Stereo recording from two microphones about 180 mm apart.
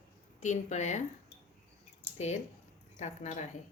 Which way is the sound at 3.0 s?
40° left (ahead or behind).